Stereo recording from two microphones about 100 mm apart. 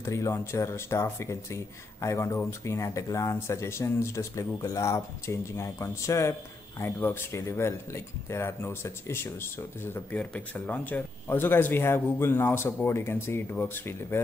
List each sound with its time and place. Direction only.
0.0 s speech: 30° left (ahead or behind)
10.1 s speech: 15° left (ahead or behind)